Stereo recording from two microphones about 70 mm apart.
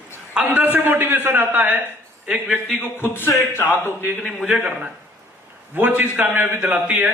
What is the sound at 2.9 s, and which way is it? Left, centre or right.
Speech, left.